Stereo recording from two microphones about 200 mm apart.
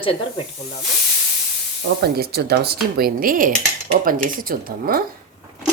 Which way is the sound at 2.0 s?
50° right (ahead or behind).